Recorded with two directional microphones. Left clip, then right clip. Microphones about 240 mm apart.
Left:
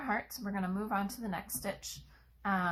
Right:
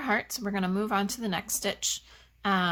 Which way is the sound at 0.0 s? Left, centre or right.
Right.